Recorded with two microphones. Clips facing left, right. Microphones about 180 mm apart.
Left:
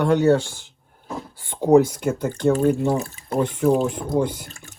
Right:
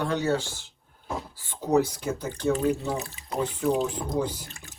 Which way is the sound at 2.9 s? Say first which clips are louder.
Left 8 dB; 35° left (ahead or behind).